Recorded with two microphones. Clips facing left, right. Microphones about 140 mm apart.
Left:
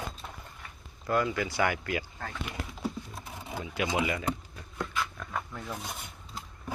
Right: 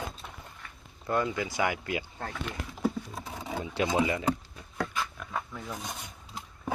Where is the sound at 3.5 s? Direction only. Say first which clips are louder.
Right 2 dB; 30° right (ahead or behind).